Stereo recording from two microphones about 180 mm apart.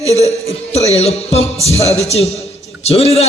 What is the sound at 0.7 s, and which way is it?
A man's voice, 35° left (ahead or behind).